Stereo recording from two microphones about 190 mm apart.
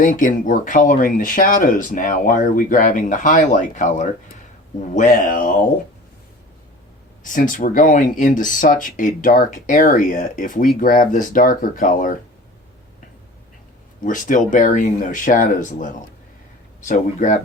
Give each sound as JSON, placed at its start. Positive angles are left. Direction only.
{"t": 0.0, "sound": "speech", "side_deg": 45}
{"t": 7.3, "sound": "speech", "side_deg": 45}
{"t": 14.0, "sound": "speech", "side_deg": 45}